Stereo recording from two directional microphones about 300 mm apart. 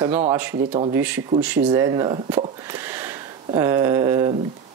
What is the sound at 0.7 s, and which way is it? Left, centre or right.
Speech, centre.